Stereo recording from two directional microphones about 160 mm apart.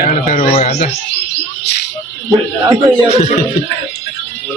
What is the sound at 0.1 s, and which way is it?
Speech, 45° left (ahead or behind).